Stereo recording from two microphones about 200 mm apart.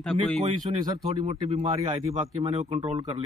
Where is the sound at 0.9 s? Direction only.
25° right (ahead or behind).